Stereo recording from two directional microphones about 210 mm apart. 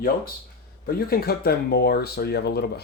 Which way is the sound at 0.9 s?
45° left (ahead or behind).